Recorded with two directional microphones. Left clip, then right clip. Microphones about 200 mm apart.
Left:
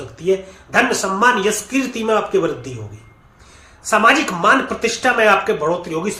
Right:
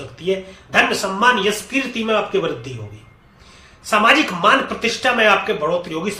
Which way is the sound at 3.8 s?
20° left (ahead or behind).